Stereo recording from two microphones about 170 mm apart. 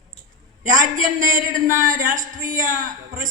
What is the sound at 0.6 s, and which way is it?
A man's voice, 50° right (ahead or behind).